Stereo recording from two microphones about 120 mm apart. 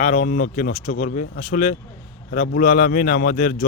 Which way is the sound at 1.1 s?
90° left.